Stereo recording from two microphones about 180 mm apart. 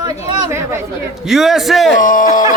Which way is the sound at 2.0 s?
50° left (ahead or behind).